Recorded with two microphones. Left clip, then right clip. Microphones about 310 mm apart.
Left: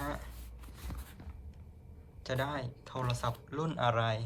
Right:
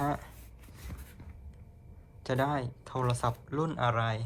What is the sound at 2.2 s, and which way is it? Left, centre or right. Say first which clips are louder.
Speech: right 5 dB; centre.